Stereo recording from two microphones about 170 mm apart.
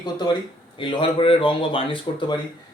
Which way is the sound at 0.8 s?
30° left (ahead or behind).